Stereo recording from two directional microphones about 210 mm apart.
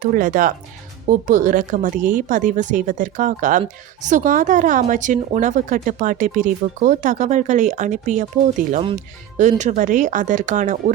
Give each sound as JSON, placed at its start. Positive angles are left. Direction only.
{"t": 0.0, "sound": "a woman's voice", "side_deg": -40}
{"t": 9.4, "sound": "a woman's voice", "side_deg": -35}